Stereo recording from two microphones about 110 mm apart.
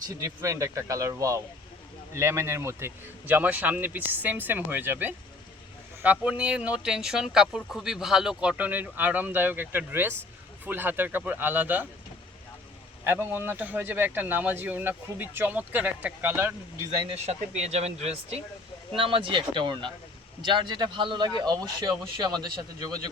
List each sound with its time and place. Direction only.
0.2 s speech: 25° right (ahead or behind)
13.1 s speech: 20° right (ahead or behind)
17.1 s speech: 85° right
18.9 s a man's voice: 55° right (ahead or behind); by 22.4 s 35° right (ahead or behind)